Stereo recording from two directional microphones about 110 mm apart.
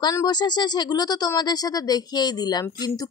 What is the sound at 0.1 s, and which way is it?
Speech, 35° left (ahead or behind).